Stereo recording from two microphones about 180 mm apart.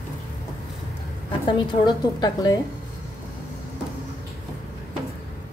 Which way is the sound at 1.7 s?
25° left (ahead or behind).